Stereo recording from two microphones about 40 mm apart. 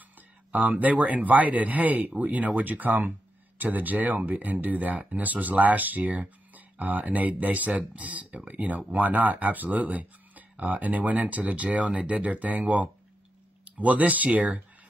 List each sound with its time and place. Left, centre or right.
0.5 s speech: right